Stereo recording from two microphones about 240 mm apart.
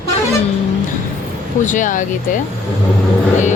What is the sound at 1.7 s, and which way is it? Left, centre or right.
Speech, left.